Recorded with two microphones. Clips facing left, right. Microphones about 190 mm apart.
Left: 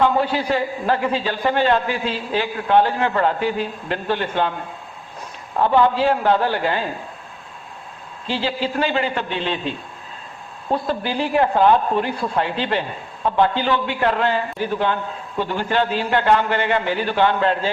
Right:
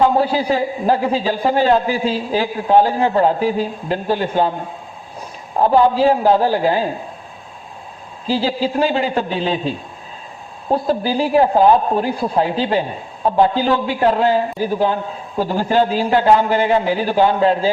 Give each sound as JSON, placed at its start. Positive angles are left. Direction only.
{"t": 0.0, "sound": "a man's voice", "side_deg": -35}
{"t": 5.5, "sound": "a man's voice", "side_deg": -35}
{"t": 8.3, "sound": "a man's voice", "side_deg": -40}